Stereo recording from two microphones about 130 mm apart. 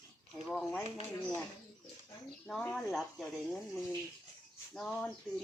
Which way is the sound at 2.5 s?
10° left (ahead or behind).